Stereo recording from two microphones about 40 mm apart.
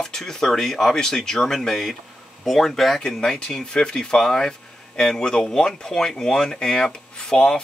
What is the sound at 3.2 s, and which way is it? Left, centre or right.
Speech, centre.